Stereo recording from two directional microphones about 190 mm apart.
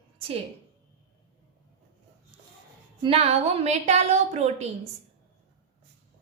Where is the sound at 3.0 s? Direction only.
30° right (ahead or behind).